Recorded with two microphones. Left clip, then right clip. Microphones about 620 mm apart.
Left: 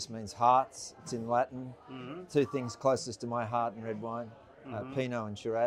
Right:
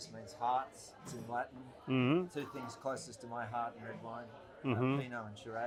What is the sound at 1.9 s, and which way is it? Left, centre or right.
Speech, right.